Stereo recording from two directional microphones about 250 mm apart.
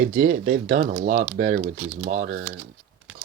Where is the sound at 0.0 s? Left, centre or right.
Right.